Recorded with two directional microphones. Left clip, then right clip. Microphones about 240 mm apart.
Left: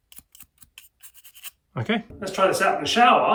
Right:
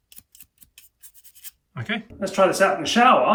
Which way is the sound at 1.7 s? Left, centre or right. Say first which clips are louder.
Left 2 dB; centre.